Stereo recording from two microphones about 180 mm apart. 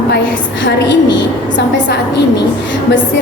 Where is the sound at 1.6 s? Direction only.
70° left (ahead or behind).